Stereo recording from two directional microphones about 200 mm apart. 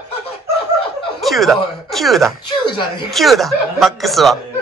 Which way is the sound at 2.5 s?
25° left (ahead or behind).